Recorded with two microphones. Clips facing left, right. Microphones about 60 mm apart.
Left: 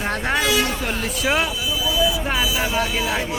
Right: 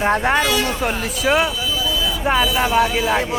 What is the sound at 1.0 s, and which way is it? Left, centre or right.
Speech, centre.